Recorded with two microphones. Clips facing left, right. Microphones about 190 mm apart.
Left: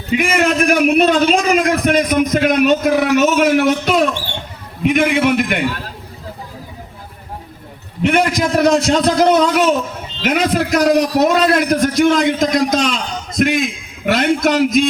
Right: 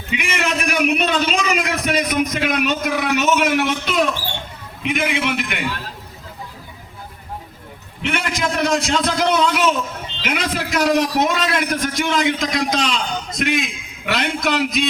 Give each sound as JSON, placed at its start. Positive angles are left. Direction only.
{"t": 0.1, "sound": "a man's voice", "side_deg": 40}
{"t": 8.0, "sound": "a man's voice", "side_deg": 40}